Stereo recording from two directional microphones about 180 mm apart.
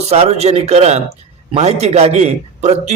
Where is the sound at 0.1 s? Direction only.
35° right (ahead or behind).